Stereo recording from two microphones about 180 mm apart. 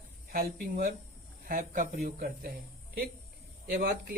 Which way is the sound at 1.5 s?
50° right (ahead or behind).